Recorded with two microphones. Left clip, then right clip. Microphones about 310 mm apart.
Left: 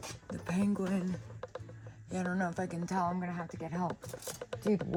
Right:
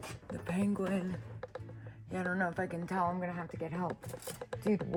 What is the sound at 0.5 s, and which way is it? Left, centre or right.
Speech, left.